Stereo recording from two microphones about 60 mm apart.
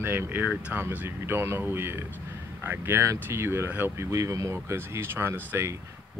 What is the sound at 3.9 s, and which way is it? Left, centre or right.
Speech, right.